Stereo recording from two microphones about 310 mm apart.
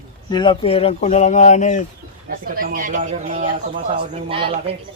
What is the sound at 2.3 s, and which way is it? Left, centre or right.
Speech, right.